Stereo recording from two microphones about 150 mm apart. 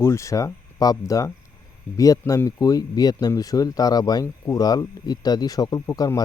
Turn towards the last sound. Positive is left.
turn(degrees=25)  # may be behind; listen again after turning